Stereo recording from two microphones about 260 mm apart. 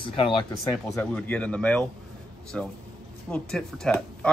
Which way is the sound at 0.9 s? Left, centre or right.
Centre.